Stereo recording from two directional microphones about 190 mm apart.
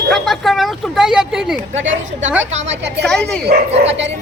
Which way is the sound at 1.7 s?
80° right.